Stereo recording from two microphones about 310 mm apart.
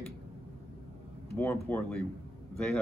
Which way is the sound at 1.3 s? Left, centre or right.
Centre.